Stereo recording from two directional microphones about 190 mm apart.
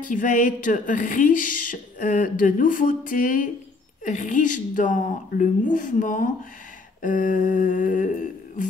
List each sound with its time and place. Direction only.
0.0 s speech: 45° left (ahead or behind)